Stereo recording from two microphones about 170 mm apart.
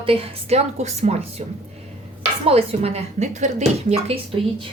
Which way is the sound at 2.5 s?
35° right (ahead or behind).